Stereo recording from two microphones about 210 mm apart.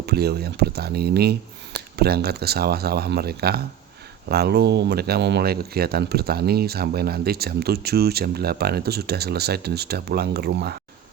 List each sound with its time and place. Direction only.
0.0 s speech: 50° right (ahead or behind)